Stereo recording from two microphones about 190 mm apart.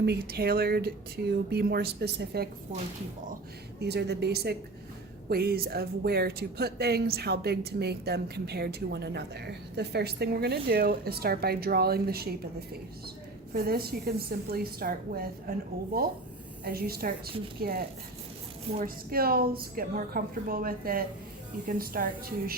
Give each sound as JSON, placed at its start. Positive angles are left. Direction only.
{"t": 0.0, "sound": "speech", "side_deg": -55}
{"t": 3.8, "sound": "a woman's voice", "side_deg": -60}
{"t": 16.6, "sound": "a woman's voice", "side_deg": -55}